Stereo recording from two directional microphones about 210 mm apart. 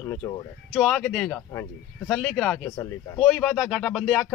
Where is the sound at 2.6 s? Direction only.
15° left (ahead or behind).